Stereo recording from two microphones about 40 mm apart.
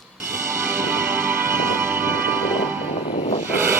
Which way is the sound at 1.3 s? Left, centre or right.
Right.